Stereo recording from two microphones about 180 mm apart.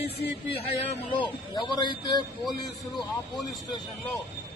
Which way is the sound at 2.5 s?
Centre (ahead or behind).